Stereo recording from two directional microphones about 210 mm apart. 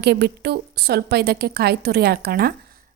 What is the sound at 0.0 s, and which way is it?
A woman's voice, 50° right (ahead or behind).